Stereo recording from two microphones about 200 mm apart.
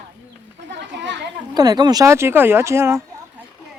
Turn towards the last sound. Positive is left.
turn(degrees=-15)  # may be behind; listen again after turning